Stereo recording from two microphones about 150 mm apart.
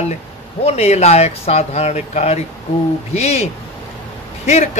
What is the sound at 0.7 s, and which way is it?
A man's voice, 45° left (ahead or behind).